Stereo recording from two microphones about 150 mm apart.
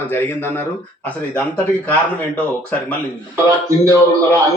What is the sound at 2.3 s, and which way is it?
Speech, 10° left (ahead or behind).